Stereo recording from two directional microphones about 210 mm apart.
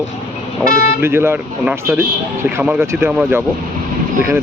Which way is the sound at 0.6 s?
40° left (ahead or behind).